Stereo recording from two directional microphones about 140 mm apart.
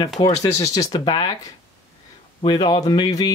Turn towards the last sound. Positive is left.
turn(degrees=25)  # may be behind; listen again after turning